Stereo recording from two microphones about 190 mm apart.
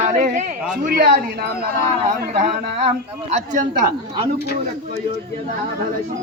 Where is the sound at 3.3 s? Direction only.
40° right (ahead or behind).